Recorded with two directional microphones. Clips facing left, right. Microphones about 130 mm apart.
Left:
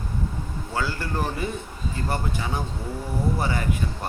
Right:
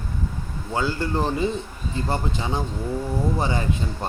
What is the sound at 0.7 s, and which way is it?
Speech, 20° right (ahead or behind).